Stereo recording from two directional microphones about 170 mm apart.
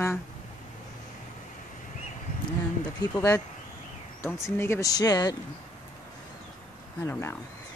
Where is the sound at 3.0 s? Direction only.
15° left (ahead or behind).